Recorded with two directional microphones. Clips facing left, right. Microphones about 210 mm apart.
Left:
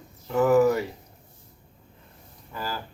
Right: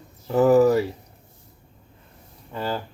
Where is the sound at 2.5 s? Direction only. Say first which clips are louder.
Right 6 dB; 25° right (ahead or behind).